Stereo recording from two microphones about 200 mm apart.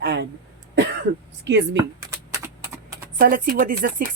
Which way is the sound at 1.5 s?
65° right (ahead or behind).